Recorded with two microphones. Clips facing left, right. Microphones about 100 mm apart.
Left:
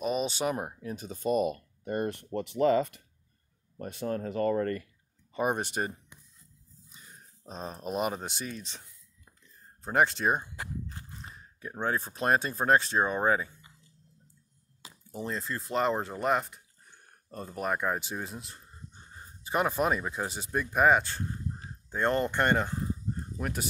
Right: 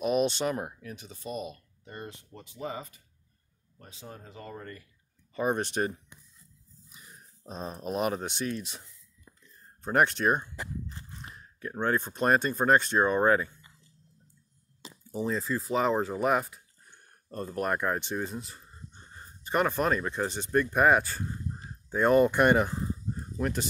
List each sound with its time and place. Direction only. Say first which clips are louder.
0.0 s speech: right 3 dB; centre (ahead or behind)
0.6 s speech: left 1 dB; 25° left (ahead or behind)
0.9 s speech: left 11 dB; 45° left (ahead or behind); by 3.1 s 85° left
3.7 s speech: left 13 dB; 70° left (ahead or behind)
5.3 s speech: right 1 dB; 15° left (ahead or behind)
7.4 s speech: right 1 dB; centre (ahead or behind)
11.6 s speech: right 3 dB; 5° left (ahead or behind)
15.0 s speech: right 5 dB; centre (ahead or behind)
23.4 s speech: right 4 dB; 5° left (ahead or behind)